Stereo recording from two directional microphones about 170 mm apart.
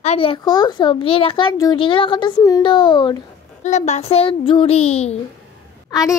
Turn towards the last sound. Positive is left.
turn(degrees=20)  # may be behind; listen again after turning